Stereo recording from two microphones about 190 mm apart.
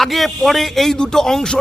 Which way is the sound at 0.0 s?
Centre (ahead or behind).